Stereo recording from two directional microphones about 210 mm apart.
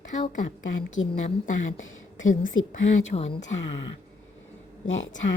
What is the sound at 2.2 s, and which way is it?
Speech, 35° left (ahead or behind).